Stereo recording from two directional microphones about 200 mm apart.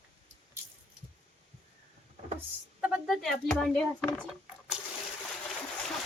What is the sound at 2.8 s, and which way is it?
Speech, centre (ahead or behind).